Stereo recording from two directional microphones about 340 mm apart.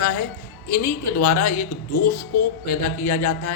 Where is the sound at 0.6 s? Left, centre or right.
Left.